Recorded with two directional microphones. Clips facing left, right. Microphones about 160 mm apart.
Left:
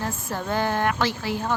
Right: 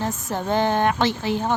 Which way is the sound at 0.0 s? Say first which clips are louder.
Right 3 dB; 20° right (ahead or behind).